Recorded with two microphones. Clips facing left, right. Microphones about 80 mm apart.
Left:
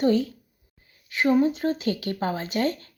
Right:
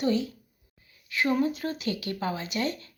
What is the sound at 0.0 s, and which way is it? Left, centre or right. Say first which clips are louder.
Speech: left 5 dB; left.